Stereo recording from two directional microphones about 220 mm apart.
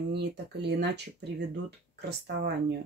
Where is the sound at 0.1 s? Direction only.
50° right (ahead or behind).